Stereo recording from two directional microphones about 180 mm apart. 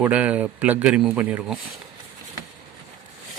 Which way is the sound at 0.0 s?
5° right (ahead or behind).